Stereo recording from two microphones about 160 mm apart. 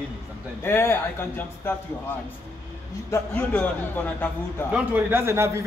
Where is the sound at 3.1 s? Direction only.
10° left (ahead or behind).